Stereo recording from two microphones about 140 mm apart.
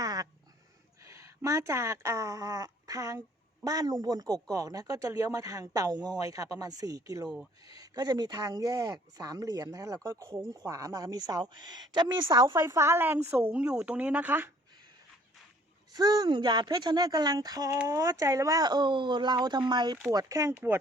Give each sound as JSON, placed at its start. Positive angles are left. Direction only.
{"t": 0.0, "sound": "a sound", "side_deg": -25}
{"t": 1.0, "sound": "speech", "side_deg": -20}
{"t": 15.9, "sound": "speech", "side_deg": -25}